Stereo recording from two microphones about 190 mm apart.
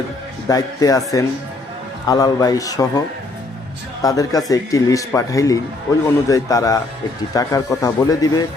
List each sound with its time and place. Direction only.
0.4 s a man's voice: 20° left (ahead or behind)
4.0 s a man's voice: 20° left (ahead or behind)